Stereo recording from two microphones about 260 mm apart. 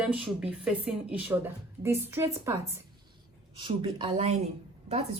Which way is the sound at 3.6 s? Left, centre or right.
Centre.